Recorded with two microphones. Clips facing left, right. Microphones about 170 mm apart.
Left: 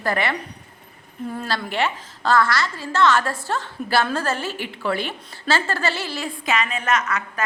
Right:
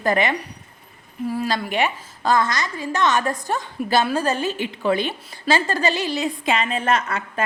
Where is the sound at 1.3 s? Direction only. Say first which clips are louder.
Right 4 dB; 5° right (ahead or behind).